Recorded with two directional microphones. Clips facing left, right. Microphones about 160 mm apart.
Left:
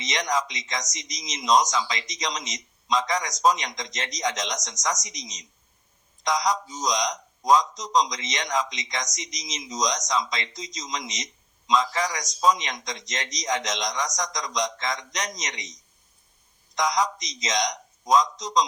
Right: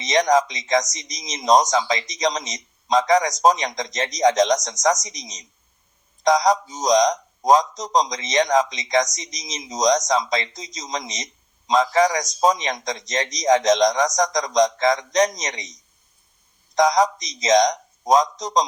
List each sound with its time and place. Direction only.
0.1 s speech: 35° right (ahead or behind)
16.7 s speech: 35° right (ahead or behind)